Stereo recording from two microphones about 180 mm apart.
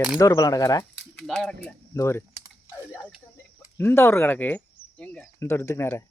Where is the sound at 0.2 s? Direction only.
20° left (ahead or behind).